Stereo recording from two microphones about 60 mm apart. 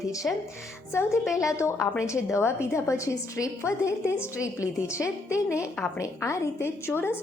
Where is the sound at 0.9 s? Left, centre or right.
Left.